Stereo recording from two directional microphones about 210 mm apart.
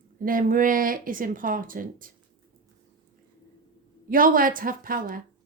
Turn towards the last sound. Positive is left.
turn(degrees=-40)  # may be behind; listen again after turning